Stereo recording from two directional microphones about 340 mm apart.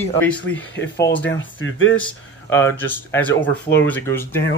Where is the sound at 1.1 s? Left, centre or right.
Left.